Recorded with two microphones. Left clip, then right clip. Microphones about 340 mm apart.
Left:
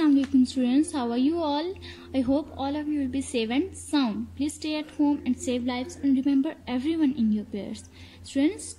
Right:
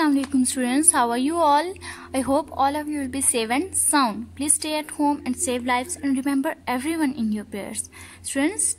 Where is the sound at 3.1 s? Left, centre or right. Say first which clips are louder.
Right 4 dB; centre.